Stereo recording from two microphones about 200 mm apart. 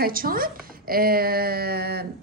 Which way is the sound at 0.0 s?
45° right (ahead or behind).